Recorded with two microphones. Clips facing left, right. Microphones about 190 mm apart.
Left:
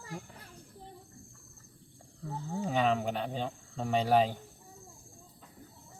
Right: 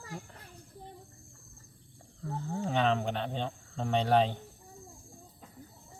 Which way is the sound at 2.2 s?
5° left (ahead or behind).